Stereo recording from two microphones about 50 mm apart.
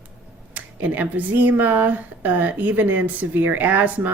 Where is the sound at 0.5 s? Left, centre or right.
Right.